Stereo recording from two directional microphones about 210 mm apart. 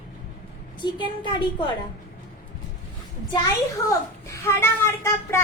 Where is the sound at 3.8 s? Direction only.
15° left (ahead or behind).